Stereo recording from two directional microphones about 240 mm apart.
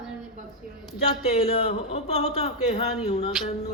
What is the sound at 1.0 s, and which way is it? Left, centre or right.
A man's voice, left.